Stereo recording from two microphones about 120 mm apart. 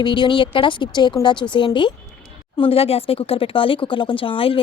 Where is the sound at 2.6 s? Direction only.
50° left (ahead or behind).